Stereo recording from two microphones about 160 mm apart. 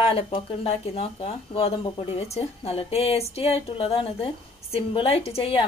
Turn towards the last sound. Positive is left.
turn(degrees=35)  # may be behind; listen again after turning